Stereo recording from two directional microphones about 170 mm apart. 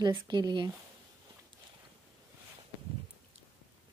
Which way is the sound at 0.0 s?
25° right (ahead or behind).